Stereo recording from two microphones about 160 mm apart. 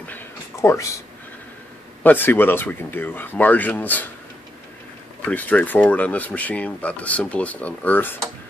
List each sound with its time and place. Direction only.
0.0 s a sound: 15° left (ahead or behind)
2.0 s speech: 10° left (ahead or behind)
5.3 s speech: 10° left (ahead or behind)